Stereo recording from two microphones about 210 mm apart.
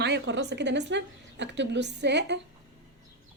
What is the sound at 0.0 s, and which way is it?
Speech, 55° right (ahead or behind).